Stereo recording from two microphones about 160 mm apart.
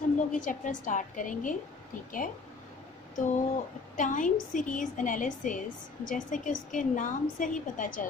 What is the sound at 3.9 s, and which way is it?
A woman's voice, 55° left (ahead or behind).